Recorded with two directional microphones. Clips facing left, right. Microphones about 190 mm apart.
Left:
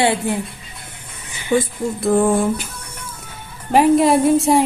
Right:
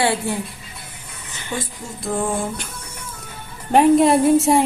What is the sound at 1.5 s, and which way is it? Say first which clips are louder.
Speech: left 10 dB; 55° left (ahead or behind).